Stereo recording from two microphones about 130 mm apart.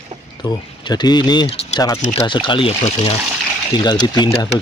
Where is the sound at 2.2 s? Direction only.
40° left (ahead or behind).